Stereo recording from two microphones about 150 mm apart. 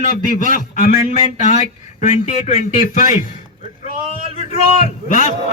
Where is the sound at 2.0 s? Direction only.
50° left (ahead or behind).